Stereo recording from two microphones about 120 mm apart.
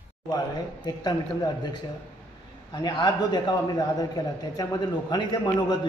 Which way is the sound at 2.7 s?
35° left (ahead or behind).